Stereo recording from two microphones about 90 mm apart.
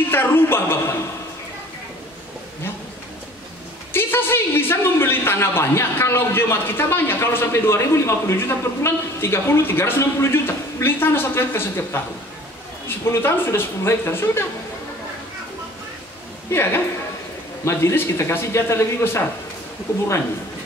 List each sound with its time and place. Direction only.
0.1 s speech: 25° left (ahead or behind)
3.9 s a man's voice: 25° left (ahead or behind)
16.4 s a woman's voice: 25° left (ahead or behind)